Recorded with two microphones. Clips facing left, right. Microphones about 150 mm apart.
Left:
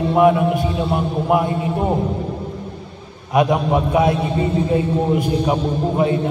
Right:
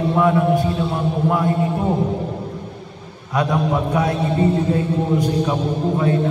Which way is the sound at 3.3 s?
20° left (ahead or behind).